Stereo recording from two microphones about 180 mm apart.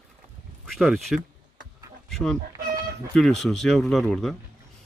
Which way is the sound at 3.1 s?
Centre (ahead or behind).